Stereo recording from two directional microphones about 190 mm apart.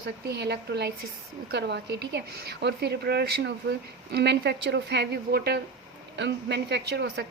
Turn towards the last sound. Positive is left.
turn(degrees=-60)  # may be behind; listen again after turning